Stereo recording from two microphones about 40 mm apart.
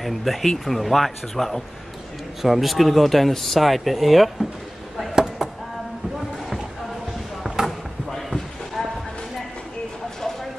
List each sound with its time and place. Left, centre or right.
0.0 s speech: centre
5.1 s chop: centre
7.6 s basketball bounce: centre
8.1 s a sound: centre